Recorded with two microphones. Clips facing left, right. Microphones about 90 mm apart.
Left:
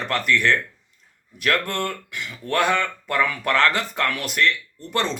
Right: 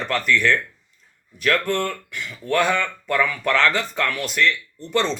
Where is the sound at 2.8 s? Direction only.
15° left (ahead or behind).